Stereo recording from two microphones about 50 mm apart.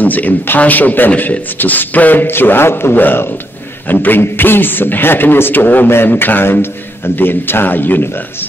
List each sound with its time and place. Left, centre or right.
0.0 s a man's voice: left